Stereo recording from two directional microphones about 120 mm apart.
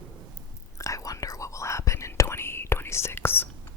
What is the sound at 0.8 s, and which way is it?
Whispering, 25° left (ahead or behind).